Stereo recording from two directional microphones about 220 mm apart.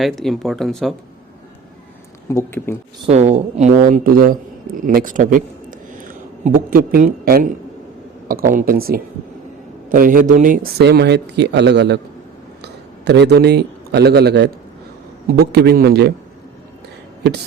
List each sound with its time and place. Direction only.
0.0 s speech: centre (ahead or behind)
2.3 s speech: 10° left (ahead or behind)
3.1 s a man's voice: 30° right (ahead or behind); by 16.1 s 45° right (ahead or behind)